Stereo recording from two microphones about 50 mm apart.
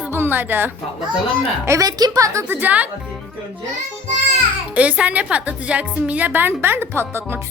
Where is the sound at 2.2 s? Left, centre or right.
Right.